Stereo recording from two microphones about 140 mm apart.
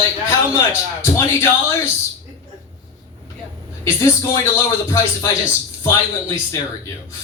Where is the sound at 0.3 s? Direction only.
20° left (ahead or behind).